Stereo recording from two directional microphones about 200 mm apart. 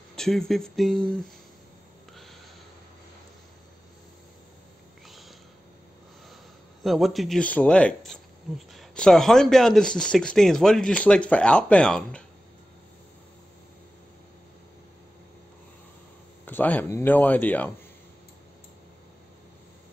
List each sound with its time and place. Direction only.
0.1 s speech: 5° left (ahead or behind)
6.8 s speech: centre (ahead or behind)
16.4 s speech: 10° left (ahead or behind)